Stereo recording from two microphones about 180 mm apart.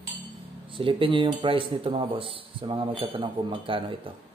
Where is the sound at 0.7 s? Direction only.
30° right (ahead or behind).